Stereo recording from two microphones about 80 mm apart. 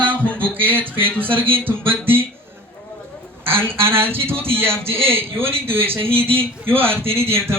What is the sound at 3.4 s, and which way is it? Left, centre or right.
A man's voice, right.